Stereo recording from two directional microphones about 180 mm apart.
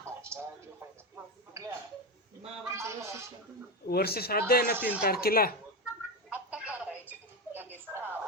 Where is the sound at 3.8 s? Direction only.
60° left (ahead or behind).